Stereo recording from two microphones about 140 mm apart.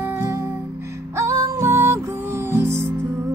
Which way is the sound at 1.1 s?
20° right (ahead or behind).